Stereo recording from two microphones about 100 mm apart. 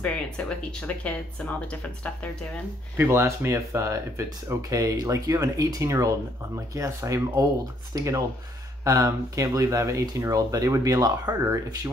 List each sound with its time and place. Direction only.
0.0 s speech: 10° left (ahead or behind)
3.0 s speech: 25° right (ahead or behind)